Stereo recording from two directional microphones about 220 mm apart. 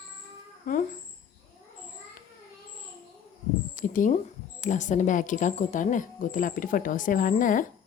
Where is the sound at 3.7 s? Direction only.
35° left (ahead or behind).